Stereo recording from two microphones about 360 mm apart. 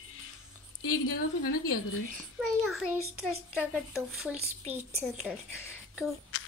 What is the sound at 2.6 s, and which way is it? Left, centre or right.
A child's voice, centre.